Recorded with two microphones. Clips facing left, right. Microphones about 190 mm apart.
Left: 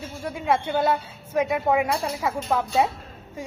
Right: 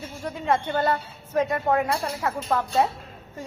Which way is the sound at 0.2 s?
10° left (ahead or behind).